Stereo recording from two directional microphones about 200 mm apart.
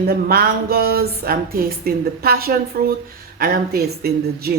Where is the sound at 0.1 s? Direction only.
50° right (ahead or behind).